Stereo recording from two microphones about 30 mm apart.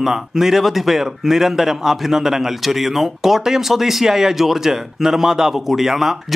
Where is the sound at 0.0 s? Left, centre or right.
Centre.